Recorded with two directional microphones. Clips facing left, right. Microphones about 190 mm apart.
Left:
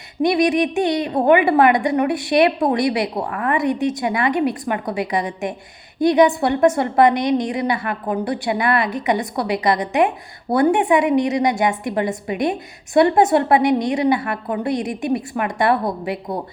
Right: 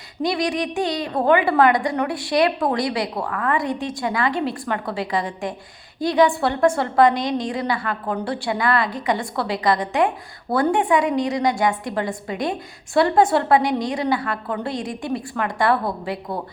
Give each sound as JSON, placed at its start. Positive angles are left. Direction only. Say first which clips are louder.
{"t": 0.2, "sound": "a woman's voice", "louder": "left 6 dB", "side_deg": 20}